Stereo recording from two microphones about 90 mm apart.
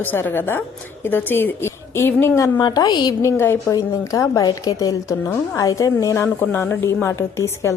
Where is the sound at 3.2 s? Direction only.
25° left (ahead or behind).